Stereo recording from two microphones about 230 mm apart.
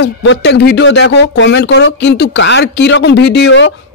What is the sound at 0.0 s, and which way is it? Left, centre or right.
Speech, left.